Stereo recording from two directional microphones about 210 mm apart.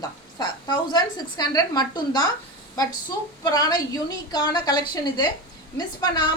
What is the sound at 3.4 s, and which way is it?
A woman's voice, 20° left (ahead or behind).